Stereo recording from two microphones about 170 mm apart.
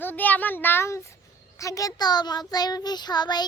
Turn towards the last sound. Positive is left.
turn(degrees=25)  # may be behind; listen again after turning